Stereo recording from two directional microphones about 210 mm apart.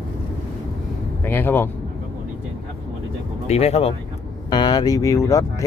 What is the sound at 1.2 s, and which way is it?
Speech, 10° left (ahead or behind).